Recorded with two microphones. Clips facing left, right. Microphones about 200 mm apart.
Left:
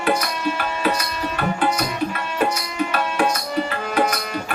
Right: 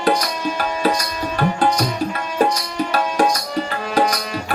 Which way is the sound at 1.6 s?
35° right (ahead or behind).